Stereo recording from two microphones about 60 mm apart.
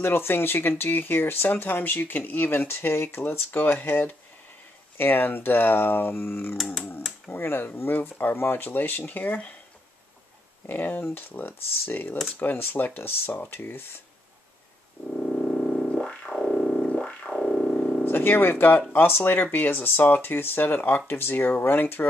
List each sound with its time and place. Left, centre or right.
0.0 s speech: left
6.5 s speech: centre
7.2 s speech: left
10.7 s speech: left
15.1 s synthesizer: centre
16.9 s music: left
18.0 s speech: left